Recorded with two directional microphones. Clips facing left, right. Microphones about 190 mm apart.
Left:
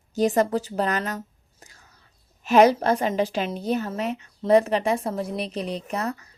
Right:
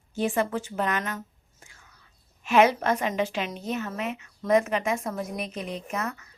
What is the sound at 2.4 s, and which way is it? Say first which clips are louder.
Speech: left 4 dB; 40° left (ahead or behind).